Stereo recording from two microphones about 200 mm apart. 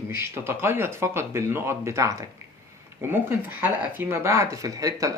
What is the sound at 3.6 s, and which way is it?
Speech, 10° right (ahead or behind).